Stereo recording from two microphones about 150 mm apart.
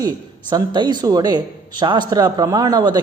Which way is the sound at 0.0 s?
30° right (ahead or behind).